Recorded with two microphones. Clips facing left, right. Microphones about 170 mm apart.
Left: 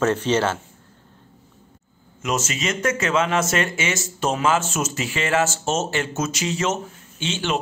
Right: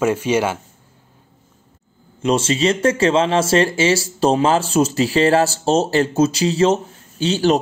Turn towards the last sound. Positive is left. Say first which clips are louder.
# right 9 dB
turn(degrees=-35)  # may be behind; listen again after turning